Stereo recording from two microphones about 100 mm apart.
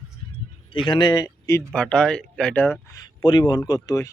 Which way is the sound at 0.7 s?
55° left (ahead or behind).